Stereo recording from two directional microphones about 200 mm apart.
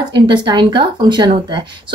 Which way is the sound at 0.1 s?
20° right (ahead or behind).